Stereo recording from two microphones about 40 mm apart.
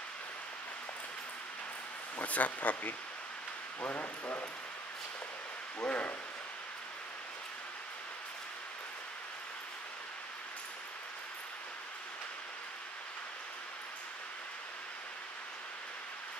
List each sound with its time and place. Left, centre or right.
2.2 s speech: left
5.9 s speech: left